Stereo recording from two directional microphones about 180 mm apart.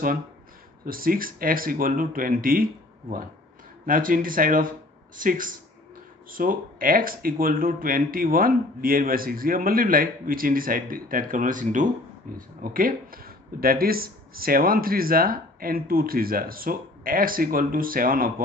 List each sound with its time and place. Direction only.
0.8 s speech: 55° right (ahead or behind)